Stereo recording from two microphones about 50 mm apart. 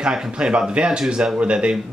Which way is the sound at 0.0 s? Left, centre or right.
Centre.